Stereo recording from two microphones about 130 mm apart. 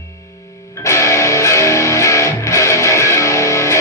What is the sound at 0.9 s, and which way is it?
Music, 20° left (ahead or behind).